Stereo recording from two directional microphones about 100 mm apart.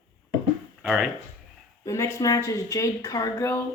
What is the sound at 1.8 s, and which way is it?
Speech, 30° left (ahead or behind).